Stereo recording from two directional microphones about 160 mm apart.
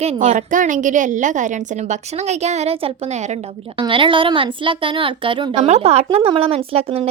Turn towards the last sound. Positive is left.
turn(degrees=-35)  # may be behind; listen again after turning